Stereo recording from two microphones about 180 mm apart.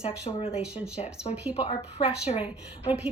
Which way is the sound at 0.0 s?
35° left (ahead or behind).